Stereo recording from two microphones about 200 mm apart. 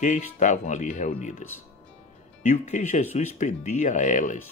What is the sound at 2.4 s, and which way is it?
Speech, 35° left (ahead or behind).